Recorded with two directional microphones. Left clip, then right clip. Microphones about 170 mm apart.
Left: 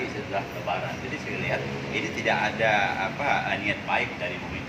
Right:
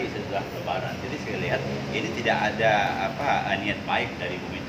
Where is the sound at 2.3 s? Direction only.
20° right (ahead or behind).